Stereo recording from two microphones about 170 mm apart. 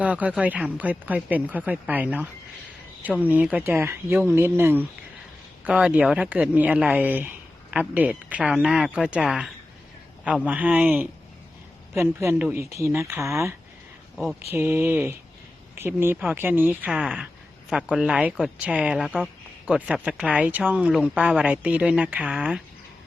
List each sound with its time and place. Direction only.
0.0 s speech: 10° right (ahead or behind)